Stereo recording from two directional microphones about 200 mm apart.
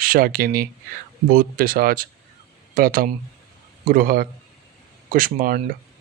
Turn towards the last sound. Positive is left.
turn(degrees=-45)  # may be behind; listen again after turning